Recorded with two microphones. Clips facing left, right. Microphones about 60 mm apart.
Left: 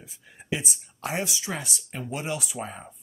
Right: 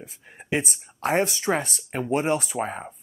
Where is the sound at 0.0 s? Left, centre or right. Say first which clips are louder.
Right 5 dB; right.